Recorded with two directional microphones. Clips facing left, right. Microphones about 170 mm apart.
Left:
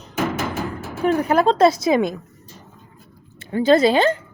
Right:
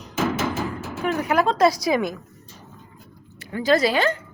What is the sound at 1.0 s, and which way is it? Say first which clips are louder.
A woman's voice: left 4 dB; 30° left (ahead or behind).